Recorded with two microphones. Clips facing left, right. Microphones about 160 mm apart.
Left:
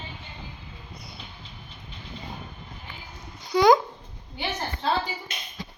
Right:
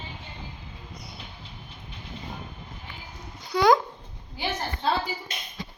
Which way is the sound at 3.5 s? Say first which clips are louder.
Left 2 dB; centre (ahead or behind).